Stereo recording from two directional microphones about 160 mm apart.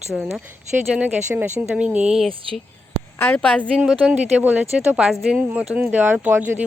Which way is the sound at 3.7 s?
5° right (ahead or behind).